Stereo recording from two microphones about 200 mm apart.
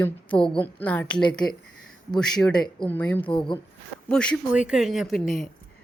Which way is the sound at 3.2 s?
25° left (ahead or behind).